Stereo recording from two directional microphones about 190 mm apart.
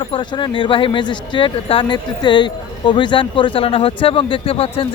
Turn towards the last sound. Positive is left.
turn(degrees=30)  # may be behind; listen again after turning